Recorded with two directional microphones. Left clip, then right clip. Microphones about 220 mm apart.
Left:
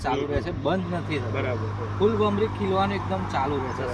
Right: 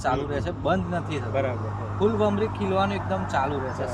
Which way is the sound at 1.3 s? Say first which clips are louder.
Right 4 dB; 40° right (ahead or behind).